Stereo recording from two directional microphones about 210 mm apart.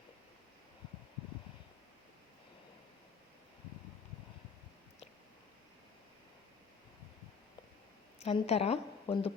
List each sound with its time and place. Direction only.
8.2 s a woman's voice: 30° left (ahead or behind)